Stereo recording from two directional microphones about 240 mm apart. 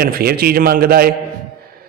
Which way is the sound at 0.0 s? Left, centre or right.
Right.